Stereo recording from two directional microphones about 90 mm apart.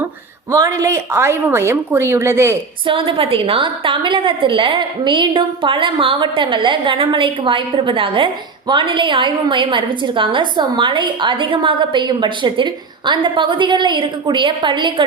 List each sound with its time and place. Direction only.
0.5 s a woman's voice: 35° right (ahead or behind)
2.8 s a woman's voice: 75° right (ahead or behind); by 15.0 s 60° right (ahead or behind)